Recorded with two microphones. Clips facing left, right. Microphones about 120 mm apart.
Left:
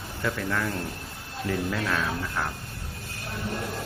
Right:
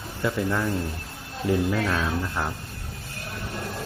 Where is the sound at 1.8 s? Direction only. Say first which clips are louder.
Right 2 dB; 15° right (ahead or behind).